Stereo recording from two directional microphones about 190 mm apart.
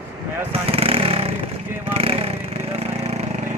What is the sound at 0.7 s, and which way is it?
Chainsaw, 30° right (ahead or behind).